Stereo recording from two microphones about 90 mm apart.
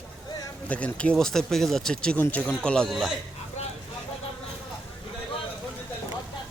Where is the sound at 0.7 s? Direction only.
15° left (ahead or behind).